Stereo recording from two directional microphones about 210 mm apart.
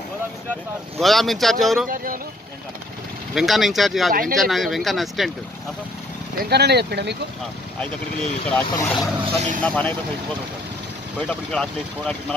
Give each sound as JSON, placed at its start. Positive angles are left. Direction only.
{"t": 0.9, "sound": "speech", "side_deg": 0}
{"t": 3.3, "sound": "speech", "side_deg": 0}
{"t": 4.1, "sound": "speech", "side_deg": -40}
{"t": 4.4, "sound": "speech", "side_deg": 0}
{"t": 6.5, "sound": "speech", "side_deg": -50}
{"t": 7.8, "sound": "speech", "side_deg": 5}
{"t": 9.2, "sound": "speech", "side_deg": -35}
{"t": 9.6, "sound": "speech", "side_deg": 5}